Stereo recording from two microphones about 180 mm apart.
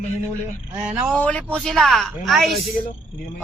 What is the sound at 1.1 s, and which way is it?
A man's voice, 5° left (ahead or behind).